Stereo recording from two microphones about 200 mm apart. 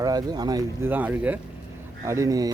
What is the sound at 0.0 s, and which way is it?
A man's voice, 20° right (ahead or behind).